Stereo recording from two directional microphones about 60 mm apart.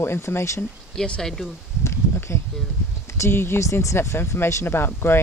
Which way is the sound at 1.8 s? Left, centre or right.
Left.